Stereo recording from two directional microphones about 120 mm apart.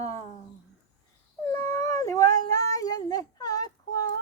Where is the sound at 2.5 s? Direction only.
30° left (ahead or behind).